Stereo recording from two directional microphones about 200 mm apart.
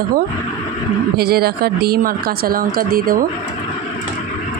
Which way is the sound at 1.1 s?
50° right (ahead or behind).